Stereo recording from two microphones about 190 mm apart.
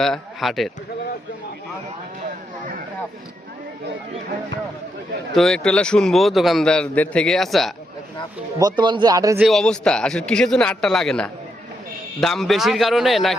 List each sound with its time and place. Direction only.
0.0 s a man's voice: centre (ahead or behind)
5.3 s a man's voice: centre (ahead or behind)
8.5 s speech: 20° right (ahead or behind)
9.4 s a man's voice: centre (ahead or behind)